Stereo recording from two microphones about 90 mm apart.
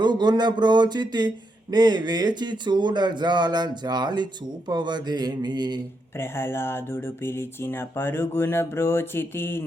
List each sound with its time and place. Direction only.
0.0 s speech: 55° right (ahead or behind)
6.1 s speech: 25° left (ahead or behind)